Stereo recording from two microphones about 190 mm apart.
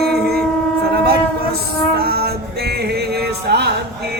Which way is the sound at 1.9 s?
55° right (ahead or behind).